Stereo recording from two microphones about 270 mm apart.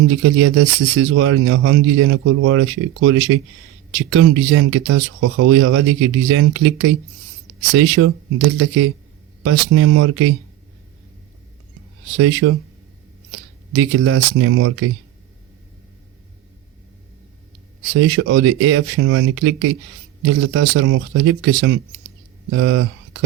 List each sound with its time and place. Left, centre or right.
0.1 s speech: right
12.1 s speech: right
13.7 s speech: right
17.9 s speech: right